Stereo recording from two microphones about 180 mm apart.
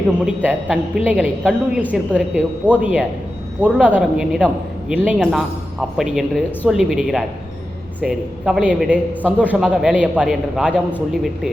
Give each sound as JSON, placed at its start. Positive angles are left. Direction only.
{"t": 0.3, "sound": "a man's voice", "side_deg": -5}